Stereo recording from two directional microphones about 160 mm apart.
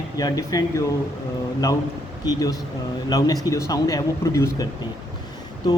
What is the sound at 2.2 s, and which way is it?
Speech, 25° left (ahead or behind).